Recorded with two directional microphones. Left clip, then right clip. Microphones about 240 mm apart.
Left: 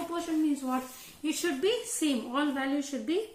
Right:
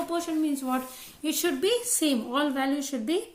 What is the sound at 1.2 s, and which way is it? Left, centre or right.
A woman's voice, right.